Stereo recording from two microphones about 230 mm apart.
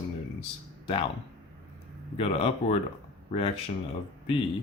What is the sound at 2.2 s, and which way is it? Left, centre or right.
Speech, left.